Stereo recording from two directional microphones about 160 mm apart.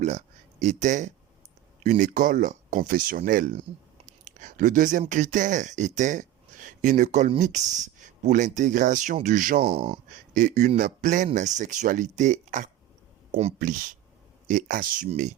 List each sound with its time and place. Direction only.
0.6 s speech: 50° right (ahead or behind)
9.6 s speech: 40° right (ahead or behind)
10.3 s speech: 50° right (ahead or behind)
14.4 s speech: 60° right (ahead or behind)